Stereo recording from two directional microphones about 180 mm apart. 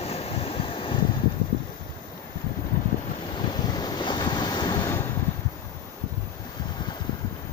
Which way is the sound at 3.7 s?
25° left (ahead or behind).